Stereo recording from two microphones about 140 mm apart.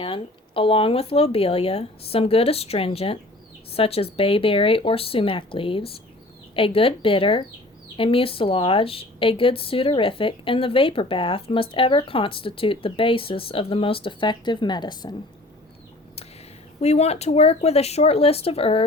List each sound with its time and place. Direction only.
0.0 s a woman's voice: 40° left (ahead or behind)
16.8 s speech: 50° left (ahead or behind)